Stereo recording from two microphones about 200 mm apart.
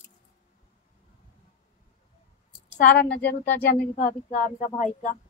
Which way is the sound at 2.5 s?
45° left (ahead or behind).